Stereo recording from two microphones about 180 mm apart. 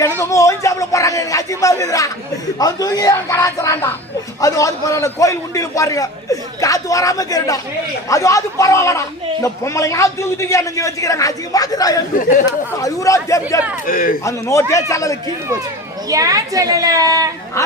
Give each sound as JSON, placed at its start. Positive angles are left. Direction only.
{"t": 0.2, "sound": "a man's voice", "side_deg": 15}
{"t": 13.8, "sound": "speech", "side_deg": 50}
{"t": 14.3, "sound": "a man's voice", "side_deg": 15}
{"t": 16.0, "sound": "a woman's voice", "side_deg": -20}